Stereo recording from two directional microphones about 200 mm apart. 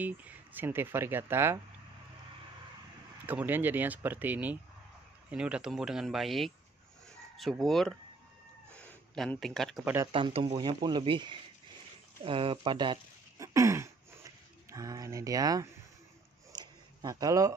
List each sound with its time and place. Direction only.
0.0 s speech: 10° right (ahead or behind)
3.3 s speech: 10° right (ahead or behind)
10.1 s speech: 30° right (ahead or behind)
12.3 s a sound: 25° right (ahead or behind)